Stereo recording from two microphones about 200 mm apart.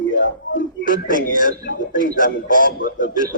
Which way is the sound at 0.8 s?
45° right (ahead or behind).